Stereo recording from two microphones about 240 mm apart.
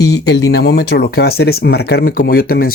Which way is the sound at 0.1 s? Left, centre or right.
Left.